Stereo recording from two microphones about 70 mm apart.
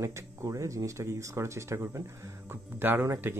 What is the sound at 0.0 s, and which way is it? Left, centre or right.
Speech, right.